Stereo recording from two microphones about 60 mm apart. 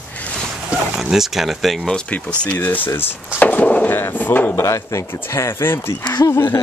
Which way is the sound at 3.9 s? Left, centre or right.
Left.